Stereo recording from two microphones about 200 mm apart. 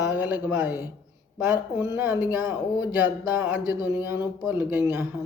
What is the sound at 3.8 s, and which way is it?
Speech, 10° right (ahead or behind).